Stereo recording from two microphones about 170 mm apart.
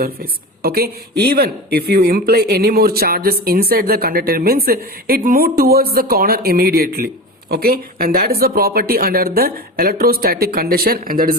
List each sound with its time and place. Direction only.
0.0 s speech: 60° right (ahead or behind)